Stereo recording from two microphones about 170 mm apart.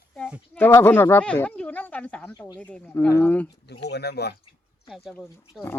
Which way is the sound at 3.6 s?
75° left (ahead or behind).